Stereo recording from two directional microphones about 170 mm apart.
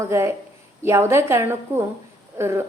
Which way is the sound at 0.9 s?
15° right (ahead or behind).